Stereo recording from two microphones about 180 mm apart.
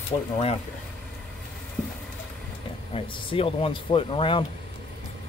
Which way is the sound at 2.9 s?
30° left (ahead or behind).